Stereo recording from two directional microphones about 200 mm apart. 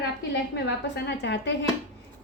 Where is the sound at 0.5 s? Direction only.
60° left (ahead or behind).